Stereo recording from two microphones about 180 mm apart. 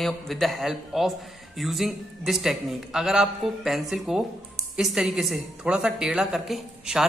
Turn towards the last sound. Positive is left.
turn(degrees=0)  # may be behind; listen again after turning